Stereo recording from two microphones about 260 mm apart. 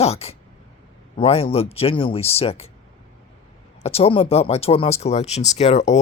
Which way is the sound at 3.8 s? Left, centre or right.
Left.